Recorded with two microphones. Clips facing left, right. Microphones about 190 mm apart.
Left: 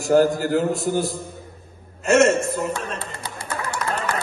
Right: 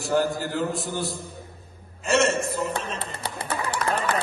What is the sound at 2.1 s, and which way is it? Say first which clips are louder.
Speech: left 6 dB; 50° left (ahead or behind).